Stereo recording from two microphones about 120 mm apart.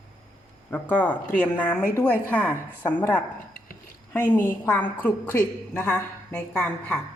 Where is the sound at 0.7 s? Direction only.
15° left (ahead or behind).